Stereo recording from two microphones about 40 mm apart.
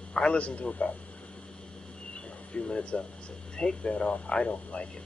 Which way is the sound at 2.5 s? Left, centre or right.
Left.